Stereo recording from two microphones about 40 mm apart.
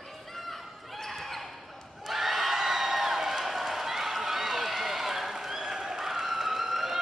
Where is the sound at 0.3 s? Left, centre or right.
Centre.